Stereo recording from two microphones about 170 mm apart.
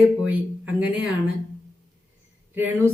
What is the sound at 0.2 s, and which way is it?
Speech, 10° right (ahead or behind).